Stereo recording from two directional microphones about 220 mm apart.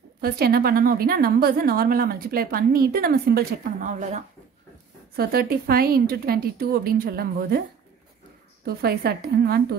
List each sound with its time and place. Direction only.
0.2 s a woman's voice: 45° right (ahead or behind)
5.1 s a woman's voice: 45° right (ahead or behind)
8.6 s a woman's voice: 45° right (ahead or behind)